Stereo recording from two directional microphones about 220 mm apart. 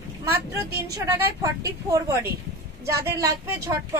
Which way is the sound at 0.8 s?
15° right (ahead or behind).